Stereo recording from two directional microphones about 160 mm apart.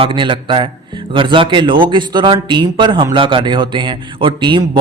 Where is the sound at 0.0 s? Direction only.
30° right (ahead or behind).